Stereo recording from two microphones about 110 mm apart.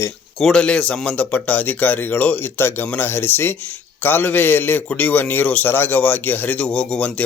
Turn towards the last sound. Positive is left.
turn(degrees=10)  # may be behind; listen again after turning